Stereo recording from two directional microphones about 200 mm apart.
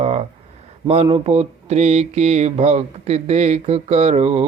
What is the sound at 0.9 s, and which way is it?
Speech, 30° right (ahead or behind).